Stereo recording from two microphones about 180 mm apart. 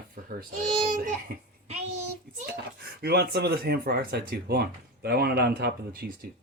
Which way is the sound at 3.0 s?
60° right (ahead or behind).